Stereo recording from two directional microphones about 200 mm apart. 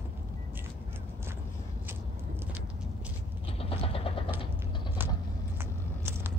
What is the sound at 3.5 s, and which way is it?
Vehicle, 30° left (ahead or behind).